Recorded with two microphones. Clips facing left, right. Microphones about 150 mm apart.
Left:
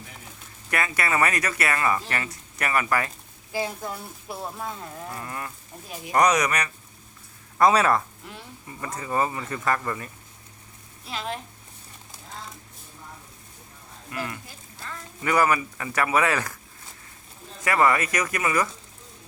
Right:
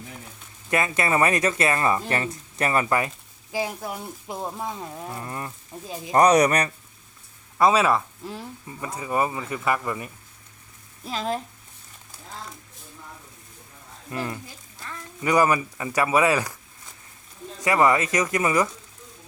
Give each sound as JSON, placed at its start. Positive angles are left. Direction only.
{"t": 0.7, "sound": "speech", "side_deg": -20}
{"t": 3.5, "sound": "speech", "side_deg": -15}
{"t": 7.6, "sound": "speech", "side_deg": -5}
{"t": 11.0, "sound": "speech", "side_deg": -40}
{"t": 14.1, "sound": "speech", "side_deg": -25}
{"t": 17.6, "sound": "speech", "side_deg": -20}